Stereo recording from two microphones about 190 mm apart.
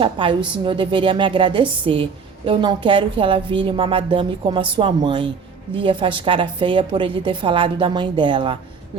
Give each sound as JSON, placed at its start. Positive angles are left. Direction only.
{"t": 0.0, "sound": "a woman's voice", "side_deg": -25}